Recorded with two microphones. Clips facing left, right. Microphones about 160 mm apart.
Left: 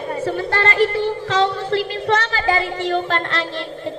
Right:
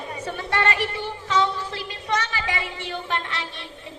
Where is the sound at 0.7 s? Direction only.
60° left (ahead or behind).